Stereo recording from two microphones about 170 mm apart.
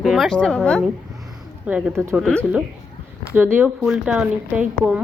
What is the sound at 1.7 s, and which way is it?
Speech, 5° right (ahead or behind).